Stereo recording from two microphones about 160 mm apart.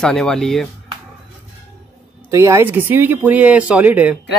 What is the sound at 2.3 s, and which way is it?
Speech, 20° right (ahead or behind).